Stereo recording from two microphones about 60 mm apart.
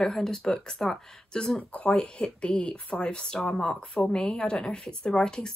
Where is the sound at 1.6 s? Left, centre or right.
Left.